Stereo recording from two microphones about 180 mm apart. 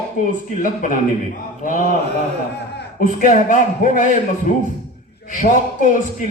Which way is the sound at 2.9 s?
50° left (ahead or behind).